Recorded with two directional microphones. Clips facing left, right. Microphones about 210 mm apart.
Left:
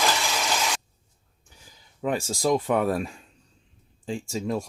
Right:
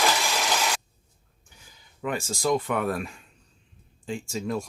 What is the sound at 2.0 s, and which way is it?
Speech, 35° left (ahead or behind).